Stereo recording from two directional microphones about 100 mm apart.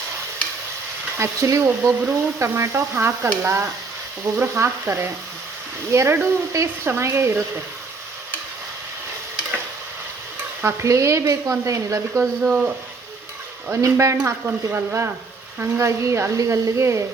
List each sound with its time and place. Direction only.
1.2 s speech: 30° right (ahead or behind)
10.6 s speech: 25° right (ahead or behind)
13.8 s speech: 30° right (ahead or behind)
14.3 s speech: 20° right (ahead or behind)